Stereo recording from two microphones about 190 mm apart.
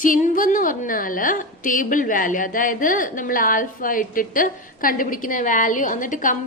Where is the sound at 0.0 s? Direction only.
45° left (ahead or behind).